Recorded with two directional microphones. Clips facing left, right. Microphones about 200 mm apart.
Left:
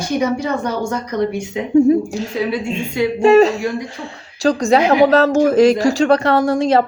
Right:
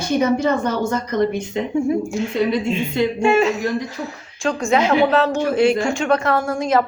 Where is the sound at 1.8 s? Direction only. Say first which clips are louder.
Left 5 dB; 35° left (ahead or behind).